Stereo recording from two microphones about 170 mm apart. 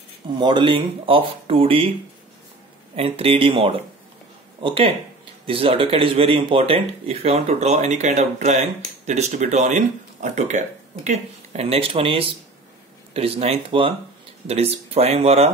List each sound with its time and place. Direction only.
0.4 s speech: 25° right (ahead or behind)
3.0 s speech: 35° right (ahead or behind)